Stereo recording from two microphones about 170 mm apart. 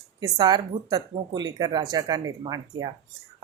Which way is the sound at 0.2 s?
20° right (ahead or behind).